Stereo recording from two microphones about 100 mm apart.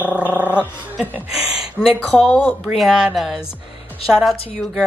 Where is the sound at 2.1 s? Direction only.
10° left (ahead or behind).